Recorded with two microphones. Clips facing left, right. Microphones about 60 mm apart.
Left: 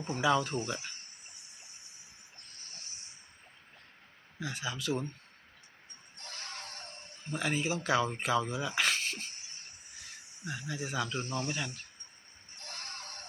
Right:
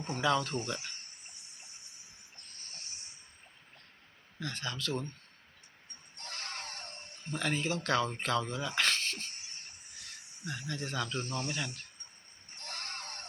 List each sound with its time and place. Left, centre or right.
0.0 s speech: centre
4.4 s speech: centre
6.3 s screaming: right
7.3 s speech: centre
11.5 s speech: centre
12.6 s a sound: right